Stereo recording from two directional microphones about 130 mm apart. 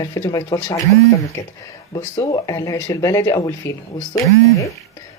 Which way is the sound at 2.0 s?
25° left (ahead or behind).